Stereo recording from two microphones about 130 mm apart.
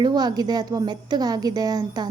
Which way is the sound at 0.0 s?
30° right (ahead or behind).